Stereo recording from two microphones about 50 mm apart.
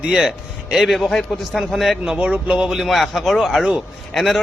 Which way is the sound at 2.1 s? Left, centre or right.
Right.